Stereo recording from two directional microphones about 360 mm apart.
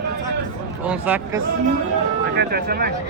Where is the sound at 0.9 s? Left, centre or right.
Centre.